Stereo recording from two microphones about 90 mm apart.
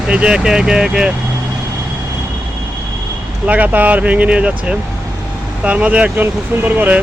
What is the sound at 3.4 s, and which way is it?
Speech, 15° right (ahead or behind).